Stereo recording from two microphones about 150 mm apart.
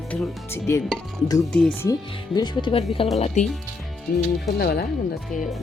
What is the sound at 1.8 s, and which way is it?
Speech, 25° left (ahead or behind).